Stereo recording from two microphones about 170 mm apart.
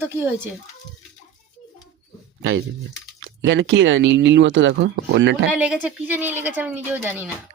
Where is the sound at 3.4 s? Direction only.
90° right.